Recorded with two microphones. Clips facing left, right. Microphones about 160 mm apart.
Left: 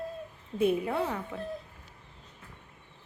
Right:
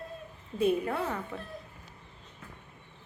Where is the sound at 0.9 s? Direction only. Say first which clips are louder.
Left 2 dB; 10° left (ahead or behind).